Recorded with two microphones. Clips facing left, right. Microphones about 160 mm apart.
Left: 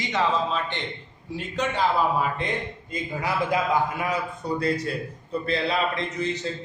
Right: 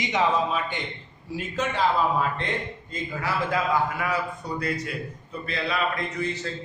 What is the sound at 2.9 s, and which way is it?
Speech, 15° left (ahead or behind).